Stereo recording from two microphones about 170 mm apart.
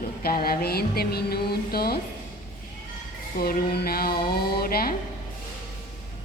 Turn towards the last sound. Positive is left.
turn(degrees=60)  # may be behind; listen again after turning